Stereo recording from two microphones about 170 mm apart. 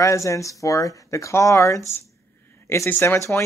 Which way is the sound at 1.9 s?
15° left (ahead or behind).